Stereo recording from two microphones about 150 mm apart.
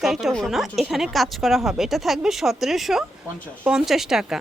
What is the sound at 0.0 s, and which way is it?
Speech, centre (ahead or behind).